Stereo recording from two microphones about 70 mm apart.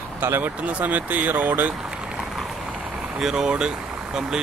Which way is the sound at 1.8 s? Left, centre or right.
Centre.